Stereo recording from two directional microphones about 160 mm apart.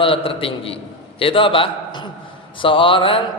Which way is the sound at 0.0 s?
35° left (ahead or behind).